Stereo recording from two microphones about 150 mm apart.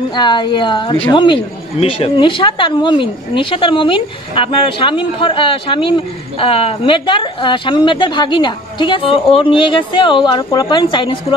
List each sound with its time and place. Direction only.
0.1 s a woman's voice: 30° left (ahead or behind)